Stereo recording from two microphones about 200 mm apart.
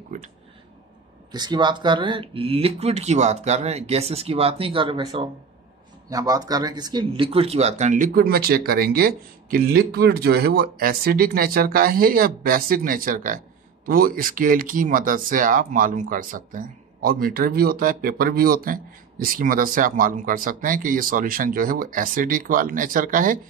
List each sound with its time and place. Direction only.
1.3 s speech: 20° right (ahead or behind); by 23.4 s 40° right (ahead or behind)